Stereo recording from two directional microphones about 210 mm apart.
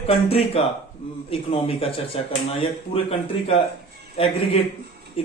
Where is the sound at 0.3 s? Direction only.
25° left (ahead or behind).